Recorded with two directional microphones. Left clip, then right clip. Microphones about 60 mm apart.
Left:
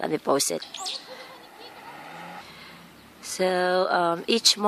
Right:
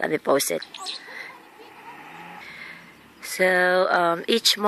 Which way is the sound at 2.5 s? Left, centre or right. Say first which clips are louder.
Right 6 dB; centre.